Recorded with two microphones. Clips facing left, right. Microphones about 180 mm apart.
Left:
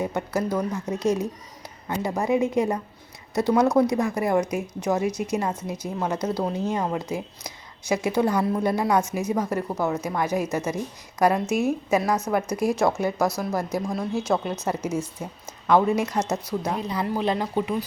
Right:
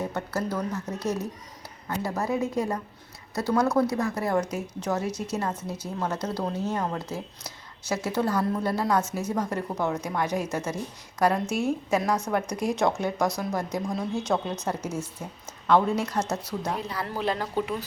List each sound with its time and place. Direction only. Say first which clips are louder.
0.0 s speech: left 4 dB; 10° left (ahead or behind)